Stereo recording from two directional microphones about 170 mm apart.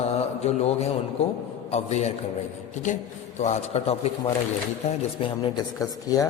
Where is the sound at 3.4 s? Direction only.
40° left (ahead or behind).